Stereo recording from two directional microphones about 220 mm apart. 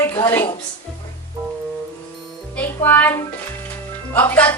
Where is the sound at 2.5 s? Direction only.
10° left (ahead or behind).